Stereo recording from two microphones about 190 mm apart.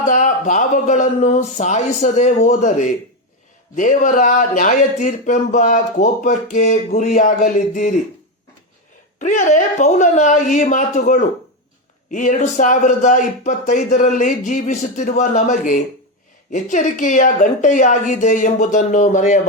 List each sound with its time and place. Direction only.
0.0 s speech: 45° left (ahead or behind)
9.1 s speech: 40° left (ahead or behind)